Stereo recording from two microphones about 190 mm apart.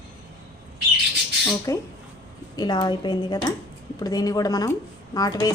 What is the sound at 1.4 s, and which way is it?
Speech, 15° left (ahead or behind).